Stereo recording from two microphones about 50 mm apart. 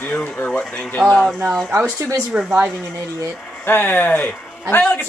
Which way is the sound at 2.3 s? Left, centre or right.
Right.